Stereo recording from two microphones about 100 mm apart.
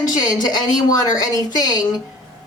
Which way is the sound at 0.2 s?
40° left (ahead or behind).